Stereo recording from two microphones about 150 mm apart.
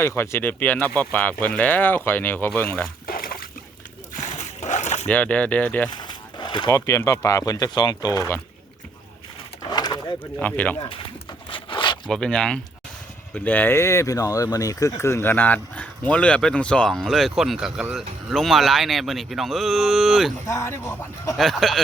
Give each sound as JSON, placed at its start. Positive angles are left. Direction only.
{"t": 0.2, "sound": "speech", "side_deg": 15}
{"t": 3.1, "sound": "a sound", "side_deg": 75}
{"t": 4.1, "sound": "splash", "side_deg": 55}
{"t": 5.0, "sound": "speech", "side_deg": 10}
{"t": 5.9, "sound": "a sound", "side_deg": 30}
{"t": 6.7, "sound": "speech", "side_deg": 20}
{"t": 9.6, "sound": "bird", "side_deg": 30}
{"t": 10.4, "sound": "speech", "side_deg": 10}
{"t": 11.4, "sound": "a sound", "side_deg": 35}
{"t": 12.0, "sound": "speech", "side_deg": 5}
{"t": 20.5, "sound": "speech", "side_deg": 20}
{"t": 21.3, "sound": "speech", "side_deg": 0}